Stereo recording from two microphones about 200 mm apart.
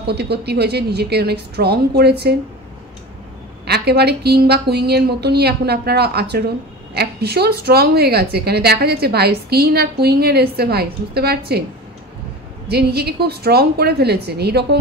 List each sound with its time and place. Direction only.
0.0 s a woman's voice: 55° right (ahead or behind)
3.6 s a woman's voice: 55° right (ahead or behind)
12.6 s a woman's voice: 55° right (ahead or behind)